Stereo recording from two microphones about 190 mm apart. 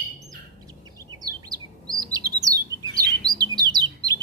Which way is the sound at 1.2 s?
20° right (ahead or behind).